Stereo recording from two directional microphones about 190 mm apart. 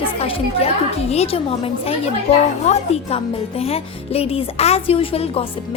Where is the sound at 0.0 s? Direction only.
30° left (ahead or behind).